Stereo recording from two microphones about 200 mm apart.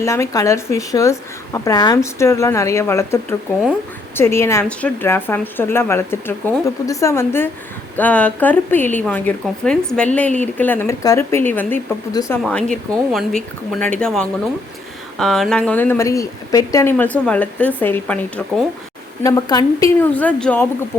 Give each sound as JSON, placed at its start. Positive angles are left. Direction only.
{"t": 0.0, "sound": "speech", "side_deg": 15}
{"t": 19.2, "sound": "speech", "side_deg": 20}
{"t": 20.1, "sound": "speech", "side_deg": 5}